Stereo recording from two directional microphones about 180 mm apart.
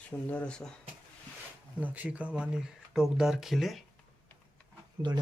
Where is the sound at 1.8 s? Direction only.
10° right (ahead or behind).